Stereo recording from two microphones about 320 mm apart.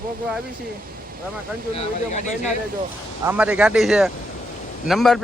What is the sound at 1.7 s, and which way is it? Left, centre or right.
Speech, left.